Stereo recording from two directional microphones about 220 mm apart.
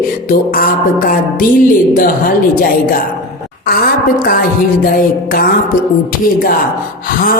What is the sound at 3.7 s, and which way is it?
Music, 45° left (ahead or behind).